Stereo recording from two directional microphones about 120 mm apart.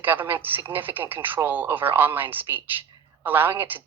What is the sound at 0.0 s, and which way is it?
A woman's voice, 15° right (ahead or behind).